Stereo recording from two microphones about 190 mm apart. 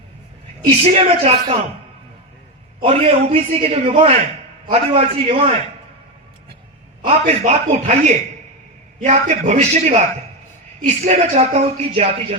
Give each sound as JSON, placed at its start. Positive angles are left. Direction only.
{"t": 0.9, "sound": "speech", "side_deg": -30}
{"t": 2.8, "sound": "speech", "side_deg": -30}
{"t": 7.0, "sound": "speech", "side_deg": -35}
{"t": 9.0, "sound": "speech", "side_deg": -40}